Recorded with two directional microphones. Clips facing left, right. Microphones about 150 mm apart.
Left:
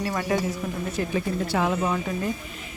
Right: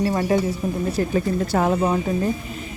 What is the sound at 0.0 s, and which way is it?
Speech, 35° right (ahead or behind).